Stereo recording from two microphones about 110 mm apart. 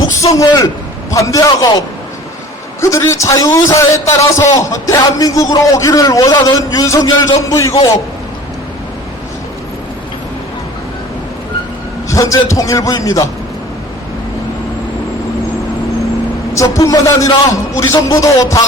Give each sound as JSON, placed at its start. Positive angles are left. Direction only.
{"t": 0.2, "sound": "a man's voice", "side_deg": 30}
{"t": 2.8, "sound": "a man's voice", "side_deg": 30}
{"t": 12.0, "sound": "a sound", "side_deg": 30}
{"t": 12.5, "sound": "a man's voice", "side_deg": 30}
{"t": 16.6, "sound": "a man's voice", "side_deg": 30}